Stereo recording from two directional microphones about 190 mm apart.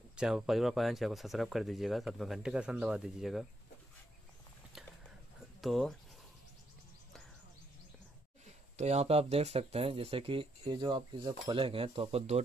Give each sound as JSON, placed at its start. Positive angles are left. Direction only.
{"t": 0.1, "sound": "speech", "side_deg": -5}
{"t": 5.4, "sound": "a sound", "side_deg": 0}
{"t": 8.7, "sound": "speech", "side_deg": -35}